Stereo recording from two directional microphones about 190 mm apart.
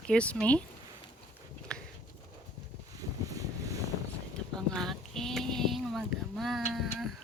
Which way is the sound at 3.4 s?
15° right (ahead or behind).